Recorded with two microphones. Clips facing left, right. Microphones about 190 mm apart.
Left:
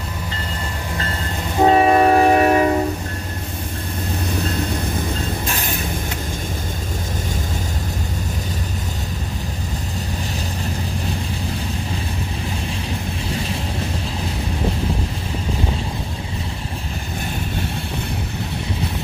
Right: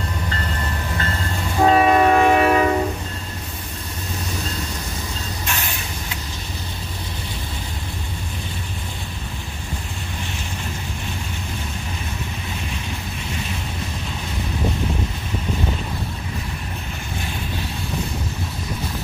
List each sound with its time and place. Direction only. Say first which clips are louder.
1.6 s train: left 2 dB; 25° left (ahead or behind)